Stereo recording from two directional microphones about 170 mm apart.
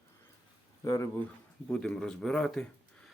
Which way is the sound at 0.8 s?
20° left (ahead or behind).